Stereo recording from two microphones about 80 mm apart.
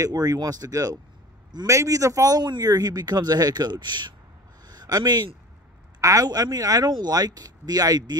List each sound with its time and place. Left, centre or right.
0.0 s a man's voice: right
4.6 s speech: right
5.9 s speech: right